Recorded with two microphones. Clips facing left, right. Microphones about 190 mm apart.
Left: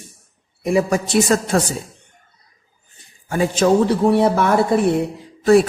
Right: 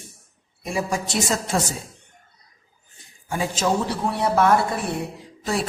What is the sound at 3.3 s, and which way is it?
A man's voice, 60° left (ahead or behind).